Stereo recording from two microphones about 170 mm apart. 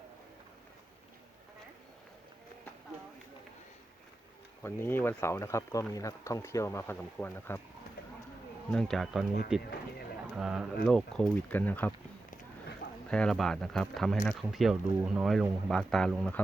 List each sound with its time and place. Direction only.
4.6 s speech: 15° left (ahead or behind)
8.7 s speech: 5° left (ahead or behind)
13.1 s speech: 5° left (ahead or behind)